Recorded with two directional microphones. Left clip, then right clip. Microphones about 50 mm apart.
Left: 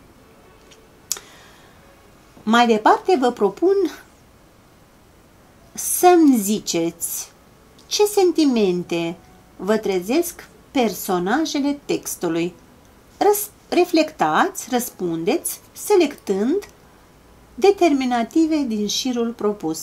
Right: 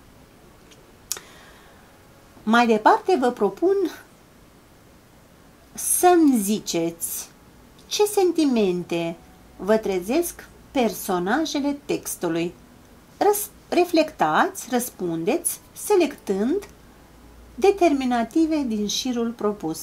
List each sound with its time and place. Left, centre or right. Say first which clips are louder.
1.1 s tick: left 4 dB; centre
2.4 s speech: left 2 dB; left
5.8 s speech: left 3 dB; left